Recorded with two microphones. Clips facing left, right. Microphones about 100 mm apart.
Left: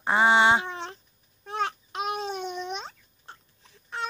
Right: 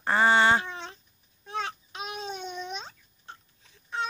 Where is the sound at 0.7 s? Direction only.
55° left (ahead or behind).